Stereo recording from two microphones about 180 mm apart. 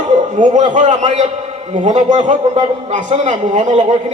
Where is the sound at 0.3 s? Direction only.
45° right (ahead or behind).